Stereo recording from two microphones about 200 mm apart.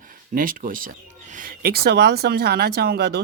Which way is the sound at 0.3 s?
45° right (ahead or behind).